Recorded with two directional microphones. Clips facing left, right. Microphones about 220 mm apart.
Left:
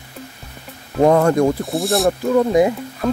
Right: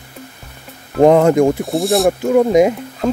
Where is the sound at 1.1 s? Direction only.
20° right (ahead or behind).